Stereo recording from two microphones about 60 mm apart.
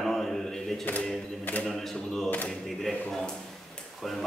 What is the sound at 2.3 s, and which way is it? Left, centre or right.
Speech, left.